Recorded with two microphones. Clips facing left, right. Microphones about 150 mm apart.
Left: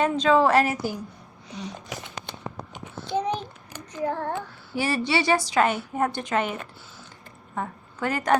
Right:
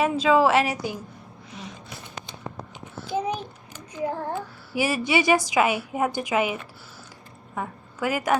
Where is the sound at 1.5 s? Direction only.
35° left (ahead or behind).